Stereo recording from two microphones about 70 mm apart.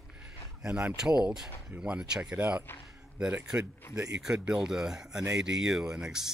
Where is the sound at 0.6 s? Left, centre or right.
Centre.